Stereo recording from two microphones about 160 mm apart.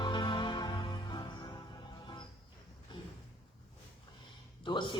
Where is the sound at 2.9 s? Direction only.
30° left (ahead or behind).